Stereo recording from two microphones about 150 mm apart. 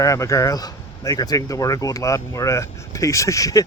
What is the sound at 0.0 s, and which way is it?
Speech, 20° left (ahead or behind).